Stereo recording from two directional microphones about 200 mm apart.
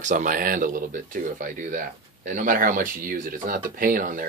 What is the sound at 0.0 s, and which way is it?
Speech, 35° right (ahead or behind).